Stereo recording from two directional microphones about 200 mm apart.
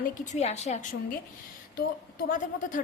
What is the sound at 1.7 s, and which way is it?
A woman's voice, 45° left (ahead or behind).